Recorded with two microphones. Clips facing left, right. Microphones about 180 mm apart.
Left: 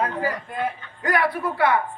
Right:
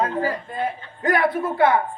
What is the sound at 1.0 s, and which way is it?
Speech, 20° right (ahead or behind).